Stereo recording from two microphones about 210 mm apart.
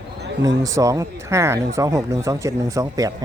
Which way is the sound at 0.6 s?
15° right (ahead or behind).